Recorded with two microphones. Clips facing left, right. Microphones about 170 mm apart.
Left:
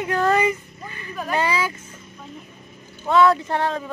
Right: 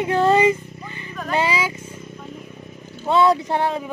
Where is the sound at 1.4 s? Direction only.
10° right (ahead or behind).